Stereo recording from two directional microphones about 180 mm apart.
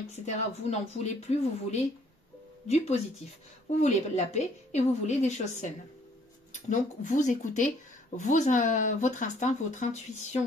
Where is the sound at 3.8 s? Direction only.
40° left (ahead or behind).